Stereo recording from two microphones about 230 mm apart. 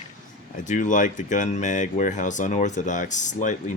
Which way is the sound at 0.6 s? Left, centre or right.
Left.